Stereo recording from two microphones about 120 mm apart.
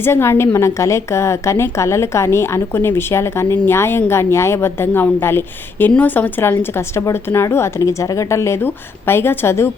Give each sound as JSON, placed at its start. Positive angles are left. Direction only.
{"t": 0.0, "sound": "a woman's voice", "side_deg": 20}